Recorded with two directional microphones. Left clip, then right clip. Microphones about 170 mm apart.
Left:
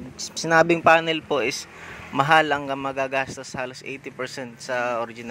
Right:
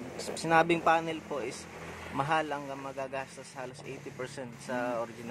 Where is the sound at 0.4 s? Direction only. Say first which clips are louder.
Left 8 dB; 30° left (ahead or behind).